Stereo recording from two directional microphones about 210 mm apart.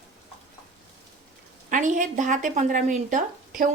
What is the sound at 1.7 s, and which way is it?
Speech, 35° right (ahead or behind).